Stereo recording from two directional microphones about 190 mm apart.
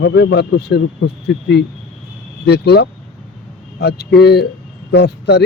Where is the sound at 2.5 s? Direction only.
60° left (ahead or behind).